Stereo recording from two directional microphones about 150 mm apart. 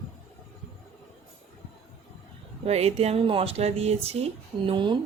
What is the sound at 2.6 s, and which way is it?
Speech, 45° right (ahead or behind).